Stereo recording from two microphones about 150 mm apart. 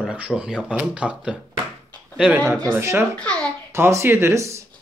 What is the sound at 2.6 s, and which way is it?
Speech, 20° right (ahead or behind).